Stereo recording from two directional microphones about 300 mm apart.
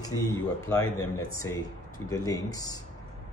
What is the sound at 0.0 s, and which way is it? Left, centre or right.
Speech, centre.